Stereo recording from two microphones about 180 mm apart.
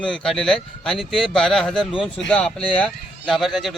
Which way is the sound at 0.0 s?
5° left (ahead or behind).